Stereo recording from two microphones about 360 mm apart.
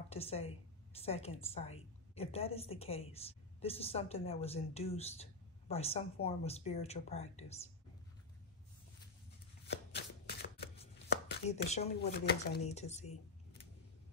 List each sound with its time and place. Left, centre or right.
0.1 s a woman's voice: centre
9.9 s shuffling cards: left
11.1 s speech: centre